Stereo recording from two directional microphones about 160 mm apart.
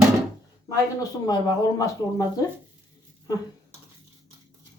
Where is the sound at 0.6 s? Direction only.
20° left (ahead or behind).